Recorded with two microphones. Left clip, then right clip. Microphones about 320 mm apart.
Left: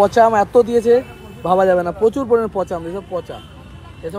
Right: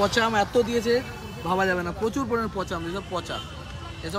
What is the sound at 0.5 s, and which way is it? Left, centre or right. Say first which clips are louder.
Speech: left 10 dB; left.